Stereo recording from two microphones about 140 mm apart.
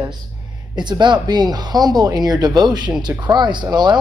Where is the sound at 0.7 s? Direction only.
30° right (ahead or behind).